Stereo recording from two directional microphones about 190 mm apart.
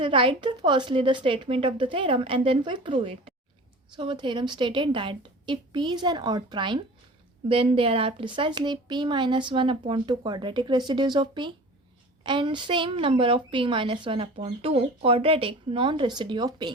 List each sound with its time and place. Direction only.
0.0 s a woman's voice: 25° right (ahead or behind)